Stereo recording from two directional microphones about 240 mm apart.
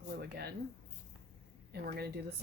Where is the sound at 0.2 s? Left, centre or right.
Right.